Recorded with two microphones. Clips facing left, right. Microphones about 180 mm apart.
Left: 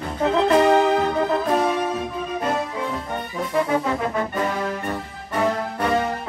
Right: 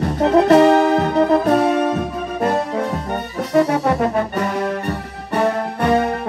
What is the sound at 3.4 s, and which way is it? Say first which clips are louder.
Music: right 5 dB; 75° right (ahead or behind).